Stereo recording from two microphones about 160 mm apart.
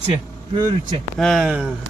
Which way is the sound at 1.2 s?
Centre (ahead or behind).